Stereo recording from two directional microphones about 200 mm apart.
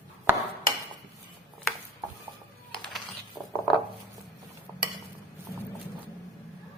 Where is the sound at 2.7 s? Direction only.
Centre (ahead or behind).